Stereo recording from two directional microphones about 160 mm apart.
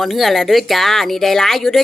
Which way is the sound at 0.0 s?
Centre (ahead or behind).